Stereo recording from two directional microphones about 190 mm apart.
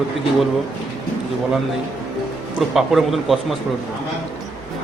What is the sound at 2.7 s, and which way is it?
Speech, centre (ahead or behind).